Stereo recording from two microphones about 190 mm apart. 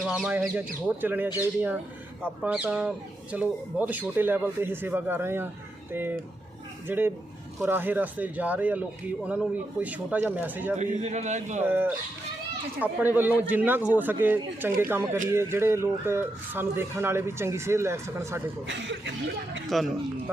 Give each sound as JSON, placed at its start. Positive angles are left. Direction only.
{"t": 0.0, "sound": "speech", "side_deg": -5}
{"t": 10.8, "sound": "a man's voice", "side_deg": -35}
{"t": 11.6, "sound": "speech", "side_deg": -10}
{"t": 18.7, "sound": "speech", "side_deg": -70}
{"t": 19.6, "sound": "speech", "side_deg": 0}